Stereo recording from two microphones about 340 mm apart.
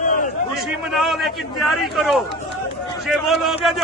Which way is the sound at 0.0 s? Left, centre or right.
Left.